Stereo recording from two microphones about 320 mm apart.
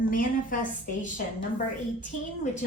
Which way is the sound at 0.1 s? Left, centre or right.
Left.